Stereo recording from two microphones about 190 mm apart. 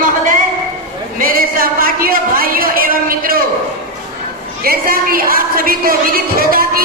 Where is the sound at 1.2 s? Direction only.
50° right (ahead or behind).